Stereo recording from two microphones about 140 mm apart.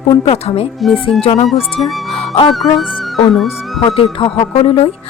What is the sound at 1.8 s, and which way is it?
Speech, centre (ahead or behind).